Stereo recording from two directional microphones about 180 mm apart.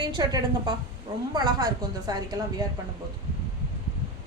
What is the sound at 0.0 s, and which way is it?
A woman's voice, 25° right (ahead or behind).